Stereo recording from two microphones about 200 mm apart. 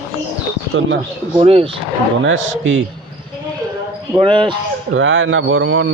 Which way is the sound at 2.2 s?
75° right (ahead or behind).